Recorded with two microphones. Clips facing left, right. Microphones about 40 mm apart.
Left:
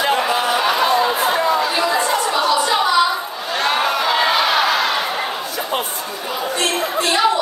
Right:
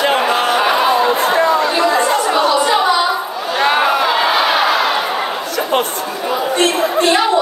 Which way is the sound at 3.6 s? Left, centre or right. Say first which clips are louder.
Right 5 dB; centre.